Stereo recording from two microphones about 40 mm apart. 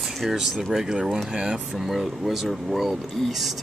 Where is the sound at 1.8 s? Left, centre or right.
Centre.